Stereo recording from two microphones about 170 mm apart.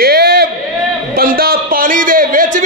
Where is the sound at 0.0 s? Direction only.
65° right (ahead or behind).